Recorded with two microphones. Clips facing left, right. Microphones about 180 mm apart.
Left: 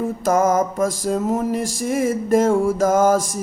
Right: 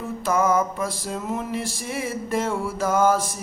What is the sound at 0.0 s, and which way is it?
Speech, 45° left (ahead or behind).